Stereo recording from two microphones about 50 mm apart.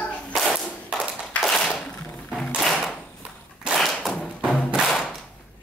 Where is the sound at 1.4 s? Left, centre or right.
Centre.